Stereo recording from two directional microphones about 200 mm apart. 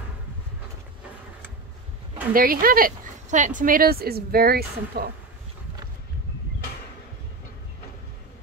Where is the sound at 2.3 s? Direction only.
45° right (ahead or behind).